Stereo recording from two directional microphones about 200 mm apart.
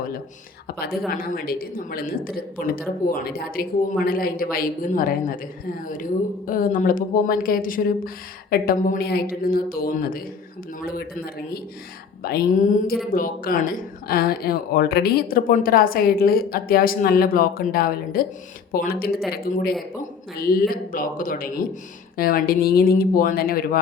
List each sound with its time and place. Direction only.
0.8 s speech: 50° left (ahead or behind)
6.5 s speech: 45° left (ahead or behind)
12.2 s speech: 50° left (ahead or behind)